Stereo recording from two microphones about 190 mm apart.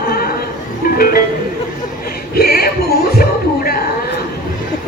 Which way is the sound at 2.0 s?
50° left (ahead or behind).